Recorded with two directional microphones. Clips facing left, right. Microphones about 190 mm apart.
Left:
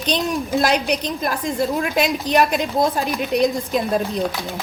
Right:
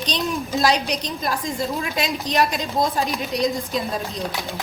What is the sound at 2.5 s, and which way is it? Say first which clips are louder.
A woman's voice: left 4 dB; 55° left (ahead or behind).